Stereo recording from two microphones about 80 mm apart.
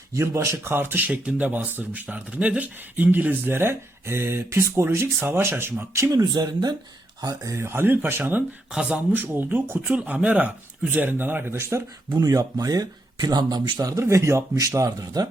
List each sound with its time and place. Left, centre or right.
0.1 s speech: right
5.9 s speech: right
7.5 s speech: right
8.7 s speech: centre
9.1 s speech: right
12.1 s speech: right
13.7 s speech: right